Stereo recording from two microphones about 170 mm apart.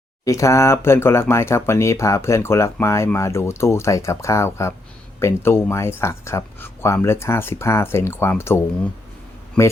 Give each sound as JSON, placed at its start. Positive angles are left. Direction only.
{"t": 0.3, "sound": "speech", "side_deg": 20}